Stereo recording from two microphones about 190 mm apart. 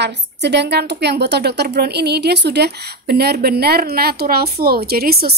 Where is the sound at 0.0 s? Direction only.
60° right (ahead or behind).